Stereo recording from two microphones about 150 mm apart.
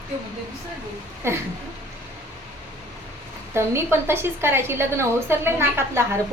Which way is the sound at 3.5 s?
15° right (ahead or behind).